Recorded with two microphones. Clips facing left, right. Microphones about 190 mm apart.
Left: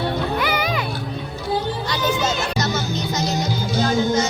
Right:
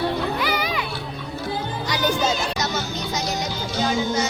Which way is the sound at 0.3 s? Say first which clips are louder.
Left 2 dB; 55° left (ahead or behind).